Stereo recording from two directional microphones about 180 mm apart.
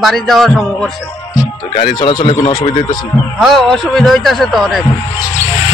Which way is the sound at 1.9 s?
25° left (ahead or behind).